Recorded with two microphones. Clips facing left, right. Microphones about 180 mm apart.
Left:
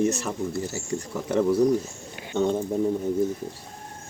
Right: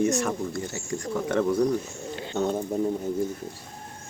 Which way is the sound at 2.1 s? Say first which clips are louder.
Left 2 dB; 15° left (ahead or behind).